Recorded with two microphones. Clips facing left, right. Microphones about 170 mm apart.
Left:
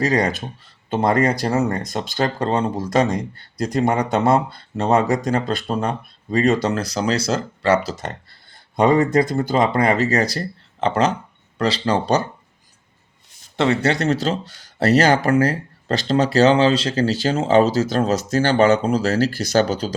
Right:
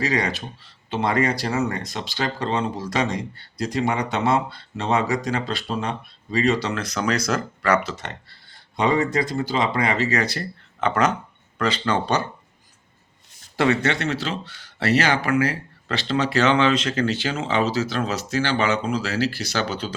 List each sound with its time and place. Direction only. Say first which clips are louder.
0.0 s speech: left 5 dB; 45° left (ahead or behind)
13.6 s speech: left 2 dB; 30° left (ahead or behind)